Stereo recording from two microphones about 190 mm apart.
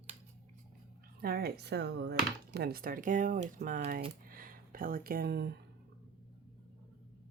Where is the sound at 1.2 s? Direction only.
55° right (ahead or behind).